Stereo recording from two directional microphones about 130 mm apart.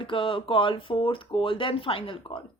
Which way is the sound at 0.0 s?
40° left (ahead or behind).